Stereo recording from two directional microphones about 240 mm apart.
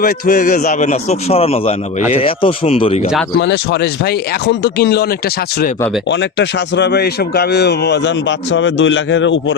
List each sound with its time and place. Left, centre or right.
0.0 s a man's voice: left
3.3 s speech: left
6.1 s speech: left